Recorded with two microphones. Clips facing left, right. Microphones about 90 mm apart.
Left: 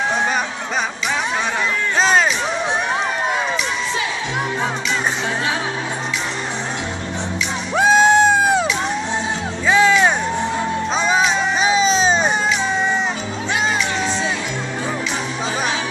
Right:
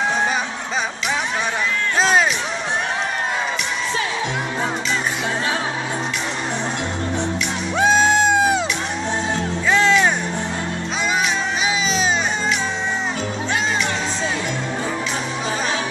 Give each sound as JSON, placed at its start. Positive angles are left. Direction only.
{"t": 2.0, "sound": "music", "side_deg": 0}
{"t": 7.7, "sound": "music", "side_deg": 15}
{"t": 9.7, "sound": "music", "side_deg": 15}
{"t": 11.1, "sound": "music", "side_deg": 30}